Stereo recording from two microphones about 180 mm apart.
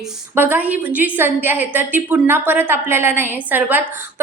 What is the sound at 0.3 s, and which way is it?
A woman's voice, 10° right (ahead or behind).